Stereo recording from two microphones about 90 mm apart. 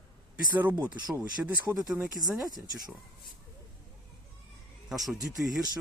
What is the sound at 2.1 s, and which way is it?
Speech, centre (ahead or behind).